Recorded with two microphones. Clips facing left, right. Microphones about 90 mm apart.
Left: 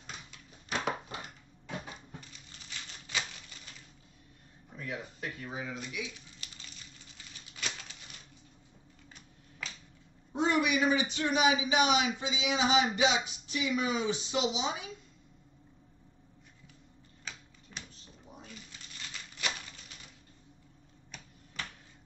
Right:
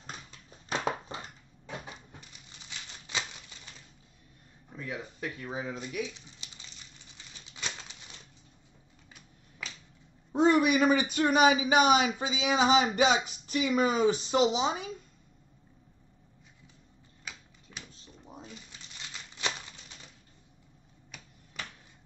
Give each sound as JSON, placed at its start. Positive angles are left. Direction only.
{"t": 0.0, "sound": "dog", "side_deg": -35}
{"t": 3.1, "sound": "typewriter", "side_deg": -25}
{"t": 5.4, "sound": "speech", "side_deg": -30}
{"t": 6.1, "sound": "a sound", "side_deg": -20}
{"t": 7.5, "sound": "typewriter", "side_deg": -20}
{"t": 10.3, "sound": "speech", "side_deg": -40}